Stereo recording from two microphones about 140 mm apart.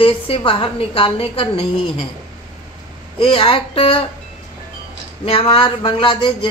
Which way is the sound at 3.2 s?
40° left (ahead or behind).